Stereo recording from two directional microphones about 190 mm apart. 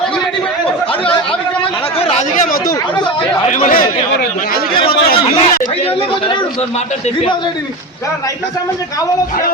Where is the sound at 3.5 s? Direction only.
45° left (ahead or behind).